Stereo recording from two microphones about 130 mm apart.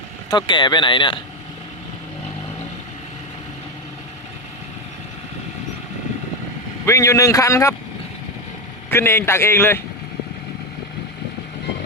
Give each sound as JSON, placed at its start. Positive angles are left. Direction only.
{"t": 0.3, "sound": "speech", "side_deg": 35}
{"t": 6.8, "sound": "speech", "side_deg": 25}
{"t": 8.9, "sound": "a man's voice", "side_deg": 20}